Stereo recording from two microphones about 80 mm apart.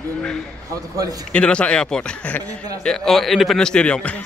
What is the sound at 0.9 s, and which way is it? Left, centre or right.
Speech, right.